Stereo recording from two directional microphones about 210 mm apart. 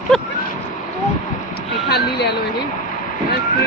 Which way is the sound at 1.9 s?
50° left (ahead or behind).